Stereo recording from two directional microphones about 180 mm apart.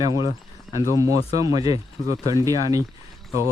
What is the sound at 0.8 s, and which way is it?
Speech, 15° right (ahead or behind).